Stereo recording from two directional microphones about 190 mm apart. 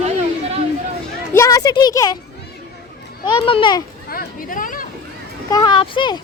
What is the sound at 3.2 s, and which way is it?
Speech, 25° left (ahead or behind).